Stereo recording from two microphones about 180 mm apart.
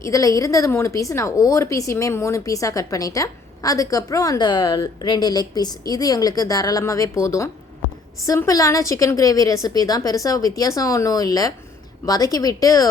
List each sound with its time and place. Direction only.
0.0 s a woman's voice: 20° left (ahead or behind)